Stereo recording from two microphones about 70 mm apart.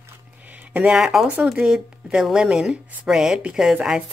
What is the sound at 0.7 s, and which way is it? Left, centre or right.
Speech, centre.